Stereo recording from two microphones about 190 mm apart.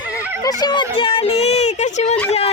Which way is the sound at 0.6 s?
25° left (ahead or behind).